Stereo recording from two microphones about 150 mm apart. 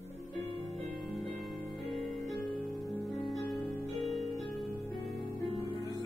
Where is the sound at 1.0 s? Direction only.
Centre (ahead or behind).